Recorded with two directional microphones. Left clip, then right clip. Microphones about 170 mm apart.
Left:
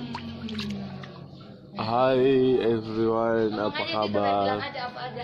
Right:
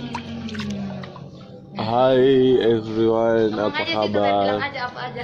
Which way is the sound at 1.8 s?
5° left (ahead or behind).